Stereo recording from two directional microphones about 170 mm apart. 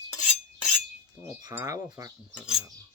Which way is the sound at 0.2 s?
Centre (ahead or behind).